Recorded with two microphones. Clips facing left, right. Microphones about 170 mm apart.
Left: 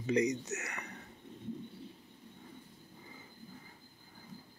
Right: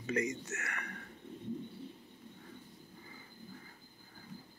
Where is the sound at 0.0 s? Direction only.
20° left (ahead or behind).